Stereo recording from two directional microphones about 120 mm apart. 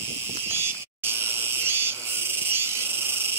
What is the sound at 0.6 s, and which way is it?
Insect, 20° right (ahead or behind).